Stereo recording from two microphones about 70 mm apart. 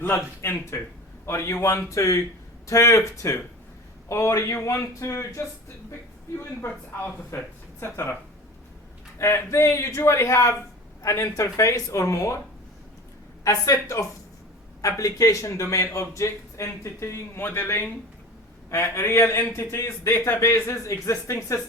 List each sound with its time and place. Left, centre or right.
0.0 s a man's voice: left
6.6 s speech: left
9.1 s a man's voice: left
13.4 s a man's voice: left
18.9 s speech: left